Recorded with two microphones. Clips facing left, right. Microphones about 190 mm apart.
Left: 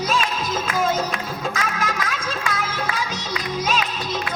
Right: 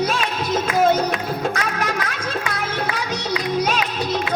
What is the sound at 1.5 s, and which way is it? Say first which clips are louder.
Music: right 2 dB; 60° right (ahead or behind).